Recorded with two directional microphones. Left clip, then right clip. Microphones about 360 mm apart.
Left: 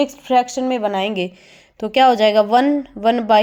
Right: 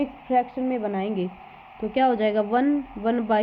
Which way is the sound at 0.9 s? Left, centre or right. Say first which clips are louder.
Left 7 dB; centre.